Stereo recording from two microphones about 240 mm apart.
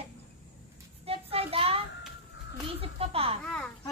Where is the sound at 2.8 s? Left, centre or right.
Right.